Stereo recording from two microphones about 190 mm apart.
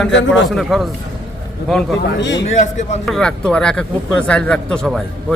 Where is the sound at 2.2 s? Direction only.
70° left (ahead or behind).